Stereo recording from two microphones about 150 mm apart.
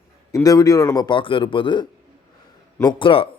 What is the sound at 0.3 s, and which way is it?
Speech, 20° left (ahead or behind).